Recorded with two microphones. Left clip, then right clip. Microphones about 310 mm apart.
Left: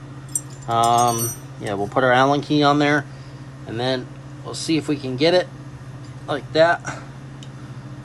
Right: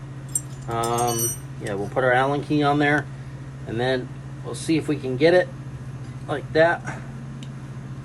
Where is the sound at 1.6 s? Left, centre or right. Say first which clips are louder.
Left 3 dB; centre.